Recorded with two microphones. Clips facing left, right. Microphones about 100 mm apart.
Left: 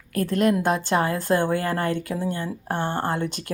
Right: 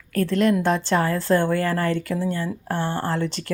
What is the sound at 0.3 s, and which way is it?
A woman's voice, 45° left (ahead or behind).